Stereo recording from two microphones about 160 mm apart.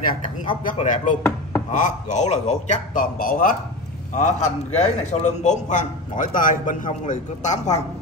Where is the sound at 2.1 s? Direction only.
50° left (ahead or behind).